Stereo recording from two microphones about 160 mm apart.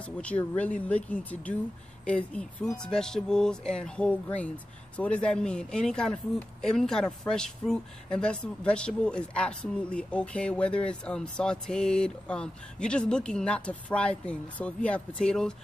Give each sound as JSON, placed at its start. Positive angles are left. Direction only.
{"t": 0.0, "sound": "speech", "side_deg": 10}